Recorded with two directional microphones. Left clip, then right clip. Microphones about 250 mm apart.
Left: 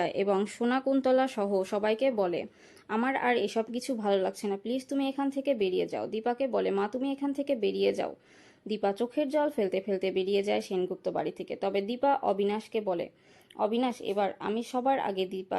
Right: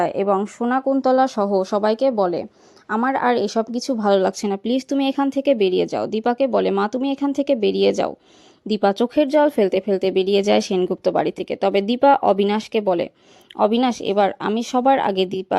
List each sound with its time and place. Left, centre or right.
0.0 s speech: centre; by 15.5 s right